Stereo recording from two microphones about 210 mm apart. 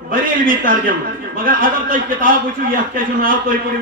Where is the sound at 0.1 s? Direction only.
40° right (ahead or behind).